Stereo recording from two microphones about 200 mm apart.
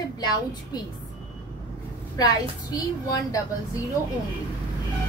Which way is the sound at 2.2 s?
20° left (ahead or behind).